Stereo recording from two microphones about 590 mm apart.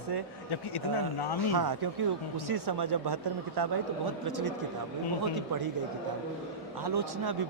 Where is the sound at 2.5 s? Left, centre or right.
Right.